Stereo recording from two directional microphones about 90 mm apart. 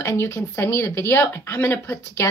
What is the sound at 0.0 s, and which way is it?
A woman's voice, 30° left (ahead or behind).